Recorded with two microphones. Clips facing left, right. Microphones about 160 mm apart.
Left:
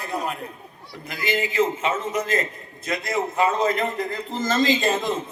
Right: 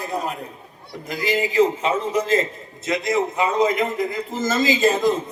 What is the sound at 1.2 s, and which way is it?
A man's voice, 35° right (ahead or behind).